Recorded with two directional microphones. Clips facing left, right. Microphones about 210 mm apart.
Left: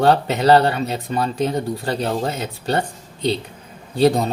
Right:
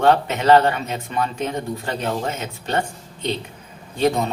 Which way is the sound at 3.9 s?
35° left (ahead or behind).